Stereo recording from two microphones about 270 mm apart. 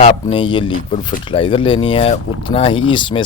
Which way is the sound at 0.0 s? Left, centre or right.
Centre.